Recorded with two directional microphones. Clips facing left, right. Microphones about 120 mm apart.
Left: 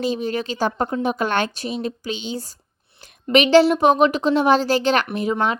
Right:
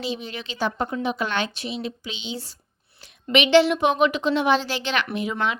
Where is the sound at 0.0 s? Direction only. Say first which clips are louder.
Left 8 dB; 45° left (ahead or behind).